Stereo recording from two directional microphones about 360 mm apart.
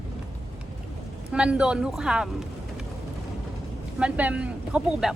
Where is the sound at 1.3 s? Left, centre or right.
Centre.